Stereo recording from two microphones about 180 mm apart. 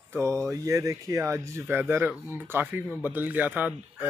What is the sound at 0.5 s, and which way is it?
Speech, 20° right (ahead or behind).